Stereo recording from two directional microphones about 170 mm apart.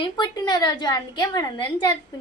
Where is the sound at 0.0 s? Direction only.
25° left (ahead or behind).